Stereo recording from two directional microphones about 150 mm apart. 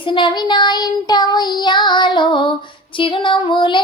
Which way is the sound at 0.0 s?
30° left (ahead or behind).